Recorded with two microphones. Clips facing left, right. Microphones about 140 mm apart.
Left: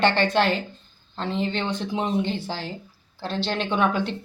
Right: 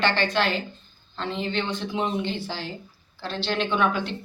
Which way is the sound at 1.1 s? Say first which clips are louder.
Left 2 dB; 40° left (ahead or behind).